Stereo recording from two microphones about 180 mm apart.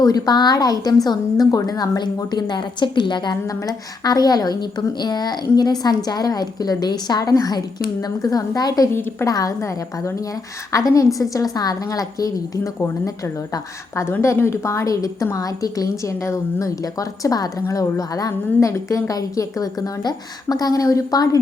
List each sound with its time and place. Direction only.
0.0 s a woman's voice: 20° left (ahead or behind)